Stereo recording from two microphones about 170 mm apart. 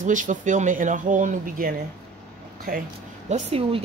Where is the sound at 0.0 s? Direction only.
50° right (ahead or behind).